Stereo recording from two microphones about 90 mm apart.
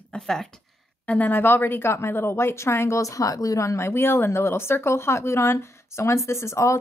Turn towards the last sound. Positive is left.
turn(degrees=30)  # may be behind; listen again after turning